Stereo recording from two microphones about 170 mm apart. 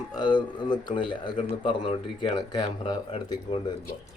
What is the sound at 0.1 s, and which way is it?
A man's voice, 25° left (ahead or behind).